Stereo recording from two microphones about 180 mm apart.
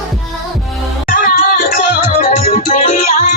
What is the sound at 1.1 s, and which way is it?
Music, 50° left (ahead or behind).